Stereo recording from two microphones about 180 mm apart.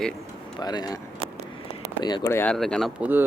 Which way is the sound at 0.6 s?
20° left (ahead or behind).